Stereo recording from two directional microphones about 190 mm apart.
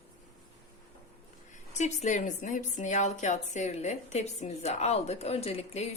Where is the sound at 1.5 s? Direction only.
35° left (ahead or behind).